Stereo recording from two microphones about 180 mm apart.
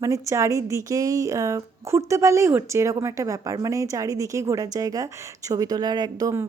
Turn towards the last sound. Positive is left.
turn(degrees=-20)  # may be behind; listen again after turning